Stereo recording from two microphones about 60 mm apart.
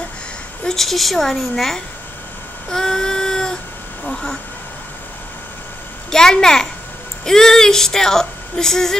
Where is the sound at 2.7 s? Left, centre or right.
Centre.